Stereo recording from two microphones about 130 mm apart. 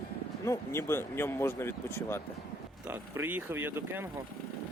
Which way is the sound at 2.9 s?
15° right (ahead or behind).